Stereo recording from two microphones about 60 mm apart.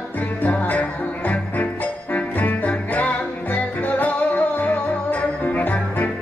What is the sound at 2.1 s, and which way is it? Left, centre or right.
Music, left.